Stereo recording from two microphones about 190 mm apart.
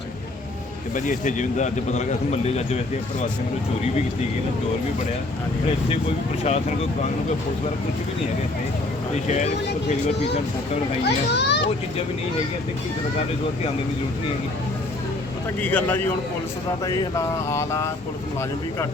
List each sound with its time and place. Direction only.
0.9 s speech: 40° left (ahead or behind)
6.4 s speech: 35° left (ahead or behind)
9.2 s speech: 35° left (ahead or behind)
11.0 s a child's voice: 60° left (ahead or behind)
15.6 s a sound: 10° left (ahead or behind)